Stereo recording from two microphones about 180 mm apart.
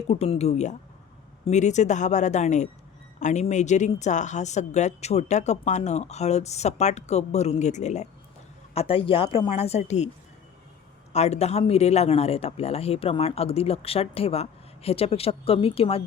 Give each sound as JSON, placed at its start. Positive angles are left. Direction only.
{"t": 0.1, "sound": "speech", "side_deg": 35}
{"t": 11.1, "sound": "speech", "side_deg": 35}